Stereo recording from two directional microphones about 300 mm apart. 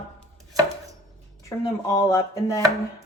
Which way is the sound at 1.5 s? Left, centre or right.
Centre.